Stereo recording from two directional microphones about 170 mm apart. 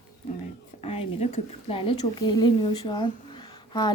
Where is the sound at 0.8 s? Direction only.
35° left (ahead or behind).